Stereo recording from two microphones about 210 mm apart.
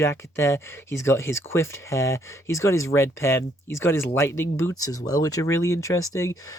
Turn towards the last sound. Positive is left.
turn(degrees=15)  # may be behind; listen again after turning